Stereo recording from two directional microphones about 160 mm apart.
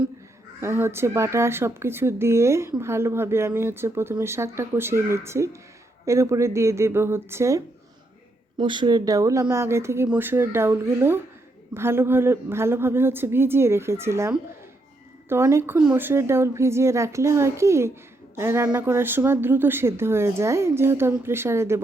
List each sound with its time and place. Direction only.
0.6 s speech: 15° right (ahead or behind)
8.5 s speech: 30° right (ahead or behind)